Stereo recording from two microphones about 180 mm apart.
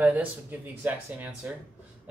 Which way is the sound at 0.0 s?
10° right (ahead or behind).